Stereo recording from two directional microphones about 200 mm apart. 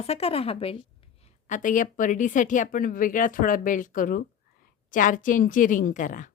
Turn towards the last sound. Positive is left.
turn(degrees=40)  # may be behind; listen again after turning